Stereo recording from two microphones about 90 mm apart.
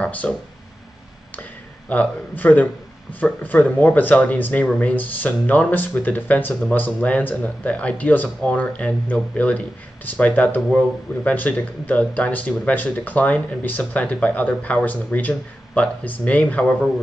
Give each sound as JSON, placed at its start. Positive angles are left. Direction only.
{"t": 0.0, "sound": "speech", "side_deg": 15}
{"t": 1.9, "sound": "speech", "side_deg": 15}